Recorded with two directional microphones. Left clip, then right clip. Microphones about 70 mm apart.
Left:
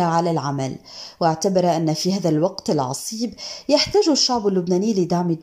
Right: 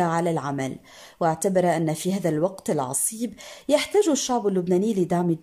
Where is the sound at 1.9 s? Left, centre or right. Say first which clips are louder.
Left 5 dB; right.